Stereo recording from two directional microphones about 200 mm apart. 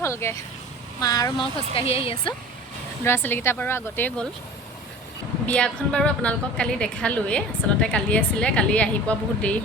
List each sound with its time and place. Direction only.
0.0 s speech: 15° left (ahead or behind)
1.7 s speech: 30° left (ahead or behind)
3.0 s speech: 10° left (ahead or behind)
5.5 s a woman's voice: 5° left (ahead or behind)